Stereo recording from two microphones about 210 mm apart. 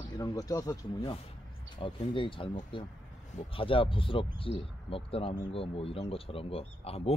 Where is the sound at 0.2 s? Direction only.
15° left (ahead or behind).